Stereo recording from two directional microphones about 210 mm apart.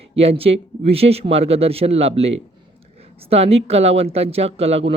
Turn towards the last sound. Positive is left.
turn(degrees=-30)  # may be behind; listen again after turning